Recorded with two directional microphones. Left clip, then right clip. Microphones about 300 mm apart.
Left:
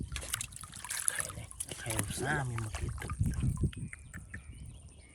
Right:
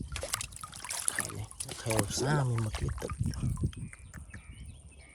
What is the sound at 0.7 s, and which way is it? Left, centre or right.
Trickle, centre.